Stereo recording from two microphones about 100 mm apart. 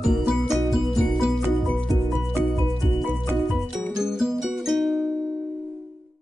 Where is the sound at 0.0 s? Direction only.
Centre (ahead or behind).